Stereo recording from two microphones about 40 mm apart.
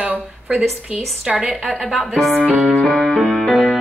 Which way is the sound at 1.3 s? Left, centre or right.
Centre.